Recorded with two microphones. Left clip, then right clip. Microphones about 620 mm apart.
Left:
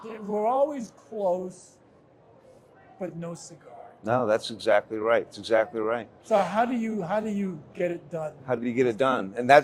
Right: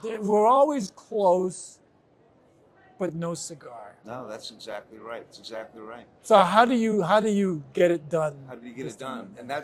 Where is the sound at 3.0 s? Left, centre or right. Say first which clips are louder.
Right 5 dB; right.